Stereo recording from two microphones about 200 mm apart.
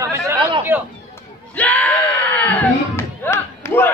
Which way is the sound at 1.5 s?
5° left (ahead or behind).